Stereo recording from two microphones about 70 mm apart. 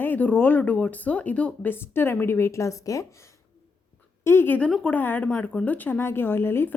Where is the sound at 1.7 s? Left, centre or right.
Left.